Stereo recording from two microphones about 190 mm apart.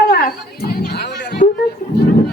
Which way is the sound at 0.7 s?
60° left (ahead or behind).